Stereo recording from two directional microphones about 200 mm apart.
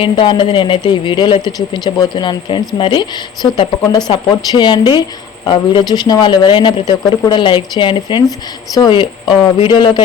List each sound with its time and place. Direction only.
0.0 s speech: 25° left (ahead or behind)